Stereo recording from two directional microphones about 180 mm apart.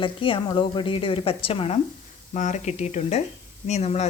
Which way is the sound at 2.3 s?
45° left (ahead or behind).